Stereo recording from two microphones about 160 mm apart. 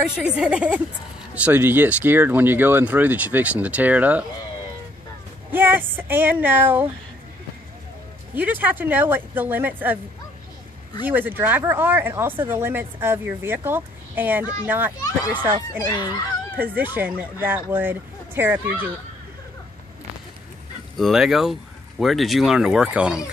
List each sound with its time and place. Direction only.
0.0 s speech: 5° right (ahead or behind)
5.5 s speech: 10° right (ahead or behind)
8.4 s speech: 10° right (ahead or behind)
11.1 s speech: 10° right (ahead or behind)
15.9 s speech: 25° left (ahead or behind)
16.5 s speech: 10° right (ahead or behind)
21.0 s speech: 5° right (ahead or behind)